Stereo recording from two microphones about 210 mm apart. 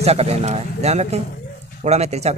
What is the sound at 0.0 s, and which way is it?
Speech, 30° right (ahead or behind).